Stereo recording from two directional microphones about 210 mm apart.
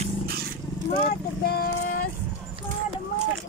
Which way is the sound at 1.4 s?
45° left (ahead or behind).